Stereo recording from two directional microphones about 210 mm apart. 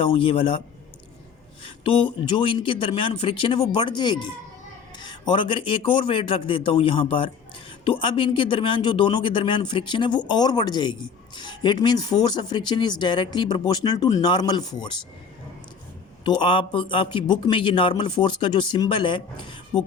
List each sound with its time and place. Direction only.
0.0 s speech: 25° left (ahead or behind)
1.8 s speech: 25° left (ahead or behind)
16.2 s speech: 20° left (ahead or behind)